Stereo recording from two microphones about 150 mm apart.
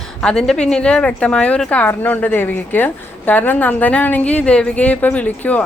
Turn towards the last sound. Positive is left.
turn(degrees=10)  # may be behind; listen again after turning